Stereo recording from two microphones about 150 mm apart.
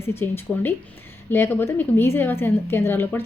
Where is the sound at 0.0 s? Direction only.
15° left (ahead or behind).